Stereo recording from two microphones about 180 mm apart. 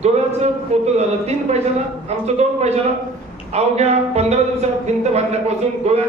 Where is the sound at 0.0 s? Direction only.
35° right (ahead or behind).